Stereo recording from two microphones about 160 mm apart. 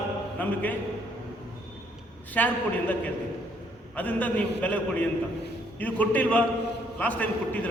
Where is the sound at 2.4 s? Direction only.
10° left (ahead or behind).